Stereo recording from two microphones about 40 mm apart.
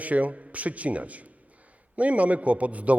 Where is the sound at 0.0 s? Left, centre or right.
Right.